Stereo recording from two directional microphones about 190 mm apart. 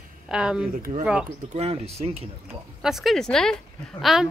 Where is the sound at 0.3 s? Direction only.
5° right (ahead or behind).